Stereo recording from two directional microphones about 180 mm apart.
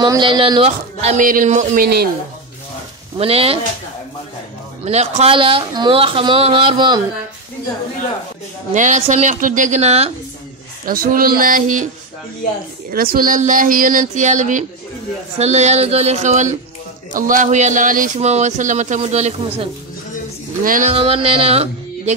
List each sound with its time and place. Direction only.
0.0 s speech: 25° right (ahead or behind)
1.2 s speech: 50° right (ahead or behind)
3.2 s speech: 35° right (ahead or behind)
4.8 s speech: 35° right (ahead or behind)
8.7 s speech: 40° right (ahead or behind)
10.9 s speech: 55° right (ahead or behind)
12.9 s speech: 55° right (ahead or behind); by 19.7 s 35° right (ahead or behind)
20.6 s speech: 50° right (ahead or behind)
20.9 s speech: 30° right (ahead or behind)